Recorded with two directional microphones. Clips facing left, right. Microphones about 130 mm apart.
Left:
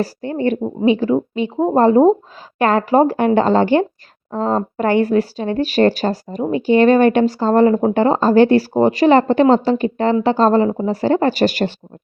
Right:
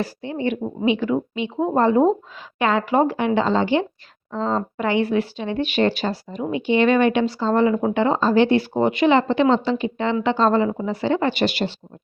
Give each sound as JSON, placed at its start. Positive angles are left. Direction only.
{"t": 0.0, "sound": "speech", "side_deg": 45}